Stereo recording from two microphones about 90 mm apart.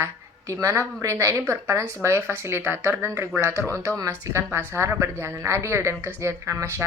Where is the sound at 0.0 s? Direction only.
35° right (ahead or behind).